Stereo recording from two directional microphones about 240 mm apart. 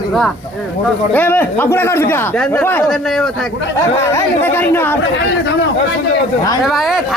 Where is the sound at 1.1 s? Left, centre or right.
Centre.